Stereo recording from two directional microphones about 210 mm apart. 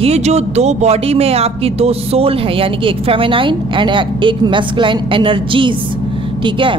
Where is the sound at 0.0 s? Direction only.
30° right (ahead or behind).